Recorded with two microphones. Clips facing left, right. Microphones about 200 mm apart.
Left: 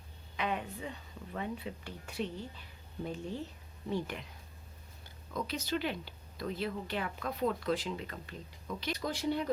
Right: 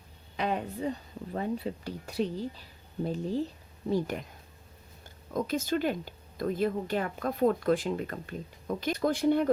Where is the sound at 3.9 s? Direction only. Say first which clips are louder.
Right 7 dB; 40° right (ahead or behind).